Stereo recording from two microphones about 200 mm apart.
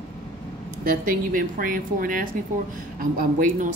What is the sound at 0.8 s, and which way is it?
Speech, 45° right (ahead or behind).